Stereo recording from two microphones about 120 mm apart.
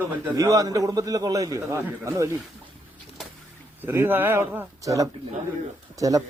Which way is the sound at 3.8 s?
15° right (ahead or behind).